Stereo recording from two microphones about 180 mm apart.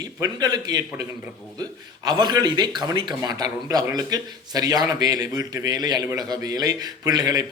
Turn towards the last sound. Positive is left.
turn(degrees=-20)  # may be behind; listen again after turning